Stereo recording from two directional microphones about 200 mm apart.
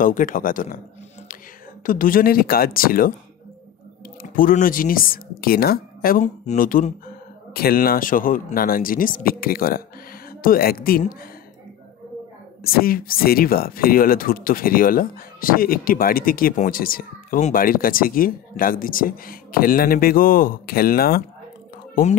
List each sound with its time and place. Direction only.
0.0 s speech: 40° left (ahead or behind)
1.9 s speech: 45° left (ahead or behind)
4.2 s speech: 45° left (ahead or behind)
12.6 s speech: 45° left (ahead or behind)